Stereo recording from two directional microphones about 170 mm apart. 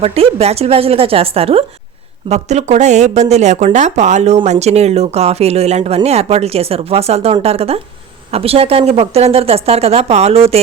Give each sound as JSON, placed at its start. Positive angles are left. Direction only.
{"t": 0.0, "sound": "speech", "side_deg": -35}